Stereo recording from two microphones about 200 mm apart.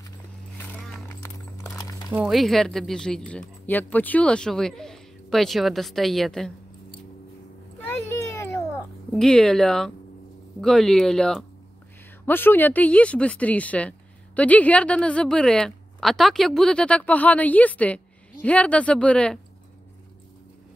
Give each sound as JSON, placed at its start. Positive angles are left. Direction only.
{"t": 0.6, "sound": "horse", "side_deg": 5}
{"t": 1.0, "sound": "clip-clop", "side_deg": 15}
{"t": 1.8, "sound": "a sound", "side_deg": 20}
{"t": 2.1, "sound": "speech", "side_deg": 0}
{"t": 7.9, "sound": "cat", "side_deg": 10}
{"t": 10.6, "sound": "speech", "side_deg": 0}